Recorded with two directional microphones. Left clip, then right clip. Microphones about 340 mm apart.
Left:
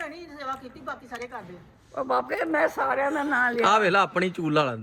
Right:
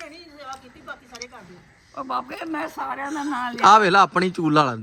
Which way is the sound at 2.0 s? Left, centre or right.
Centre.